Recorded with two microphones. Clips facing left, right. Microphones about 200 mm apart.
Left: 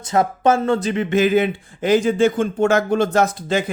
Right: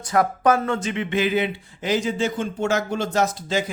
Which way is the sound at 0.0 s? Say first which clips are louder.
Left 2 dB; 25° left (ahead or behind).